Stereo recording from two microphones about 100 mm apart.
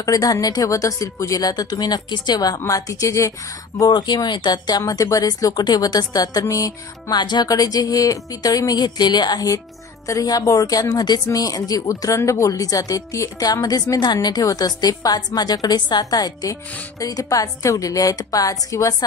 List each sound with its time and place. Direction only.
0.0 s speech: 35° left (ahead or behind)
7.2 s speech: 45° left (ahead or behind)